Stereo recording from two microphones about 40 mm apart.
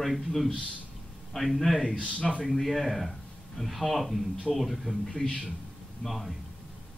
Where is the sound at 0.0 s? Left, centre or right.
Centre.